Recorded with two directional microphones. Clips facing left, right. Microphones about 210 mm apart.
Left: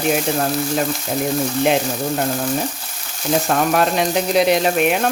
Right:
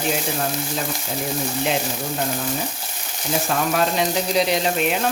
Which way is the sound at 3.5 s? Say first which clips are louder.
Left 3 dB; 55° left (ahead or behind).